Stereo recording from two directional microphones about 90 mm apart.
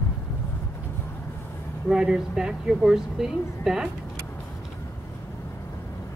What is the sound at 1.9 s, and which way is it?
Speech, 5° right (ahead or behind).